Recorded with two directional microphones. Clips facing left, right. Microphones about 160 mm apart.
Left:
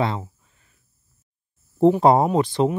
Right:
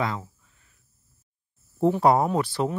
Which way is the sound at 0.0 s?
25° left (ahead or behind).